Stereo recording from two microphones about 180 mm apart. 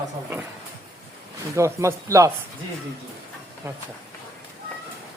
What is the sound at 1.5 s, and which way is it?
Speech, 15° right (ahead or behind).